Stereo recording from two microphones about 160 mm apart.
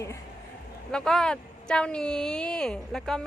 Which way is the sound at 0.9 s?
5° left (ahead or behind).